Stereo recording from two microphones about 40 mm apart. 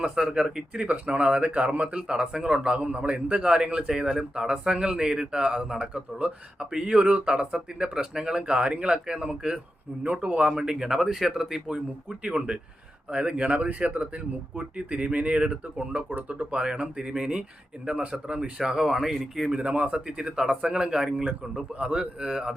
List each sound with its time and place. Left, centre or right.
0.2 s speech: centre
0.9 s speech: right
3.3 s speech: right
5.8 s speech: right
6.6 s speech: centre
6.9 s speech: right
10.0 s speech: right; by 11.6 s centre
12.2 s speech: right
18.9 s speech: centre
19.5 s speech: right